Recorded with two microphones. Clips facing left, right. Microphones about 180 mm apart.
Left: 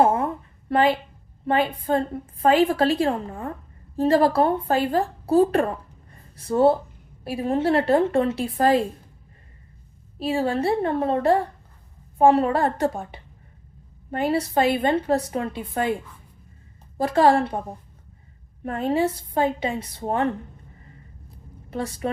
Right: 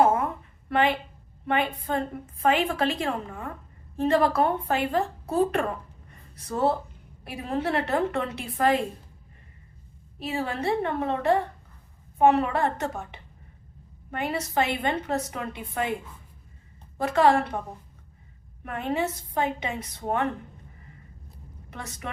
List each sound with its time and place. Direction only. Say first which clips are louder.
0.0 s a sound: left 2 dB; 30° left (ahead or behind)
0.7 s a woman's voice: left 4 dB; 35° left (ahead or behind)
6.1 s a sound: left 8 dB; 30° left (ahead or behind)
7.3 s a woman's voice: left 6 dB; 25° left (ahead or behind)
10.2 s a woman's voice: left 7 dB; 30° left (ahead or behind)
17.0 s a woman's voice: left 3 dB; 35° left (ahead or behind)
18.6 s a woman's voice: left 6 dB; 35° left (ahead or behind)
21.7 s a woman's voice: left 10 dB; 30° left (ahead or behind)